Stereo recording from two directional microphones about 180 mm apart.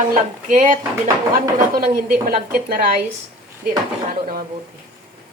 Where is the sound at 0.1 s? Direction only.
50° right (ahead or behind).